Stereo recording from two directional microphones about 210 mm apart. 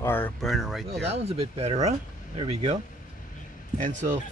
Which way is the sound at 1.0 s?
30° right (ahead or behind).